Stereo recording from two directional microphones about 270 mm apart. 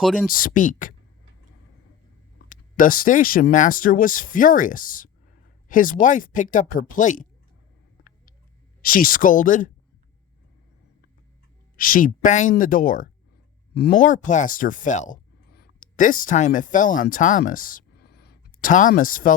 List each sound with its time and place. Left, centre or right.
0.0 s speech: centre
0.3 s speech: left
2.5 s speech: left
8.8 s speech: left
11.8 s speech: left